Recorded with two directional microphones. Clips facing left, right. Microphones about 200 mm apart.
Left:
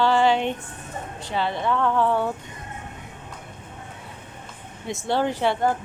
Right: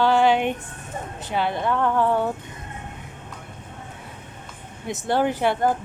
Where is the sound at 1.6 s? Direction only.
10° right (ahead or behind).